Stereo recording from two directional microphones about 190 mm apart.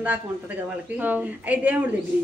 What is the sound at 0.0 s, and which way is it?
Speech, 10° right (ahead or behind).